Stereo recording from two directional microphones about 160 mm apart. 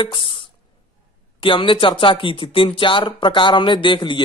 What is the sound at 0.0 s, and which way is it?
Speech, 30° left (ahead or behind).